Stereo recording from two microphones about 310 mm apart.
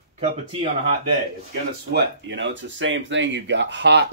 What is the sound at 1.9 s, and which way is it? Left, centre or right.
Speech, right.